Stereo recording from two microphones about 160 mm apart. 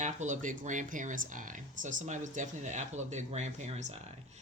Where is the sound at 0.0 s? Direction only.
50° right (ahead or behind).